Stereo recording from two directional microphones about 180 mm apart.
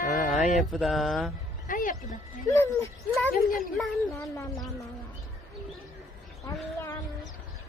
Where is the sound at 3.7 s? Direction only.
Centre (ahead or behind).